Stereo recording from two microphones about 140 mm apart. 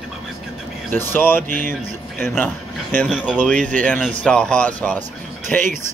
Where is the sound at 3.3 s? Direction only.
5° left (ahead or behind).